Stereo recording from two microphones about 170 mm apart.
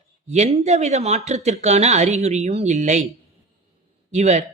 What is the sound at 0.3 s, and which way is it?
Speech, 40° right (ahead or behind).